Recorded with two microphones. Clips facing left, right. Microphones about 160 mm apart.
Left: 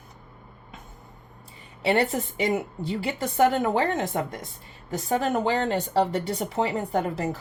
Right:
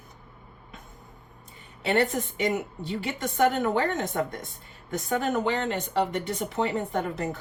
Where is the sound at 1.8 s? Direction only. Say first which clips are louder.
Left 1 dB; 35° left (ahead or behind).